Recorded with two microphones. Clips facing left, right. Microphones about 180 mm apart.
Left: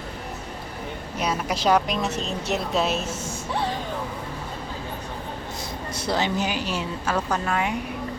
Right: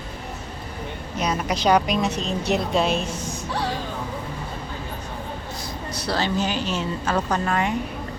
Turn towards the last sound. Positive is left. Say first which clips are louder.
# right 2 dB
turn(degrees=5)  # may be behind; listen again after turning